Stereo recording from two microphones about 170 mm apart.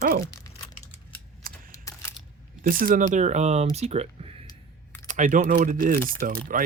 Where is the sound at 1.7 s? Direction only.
15° left (ahead or behind).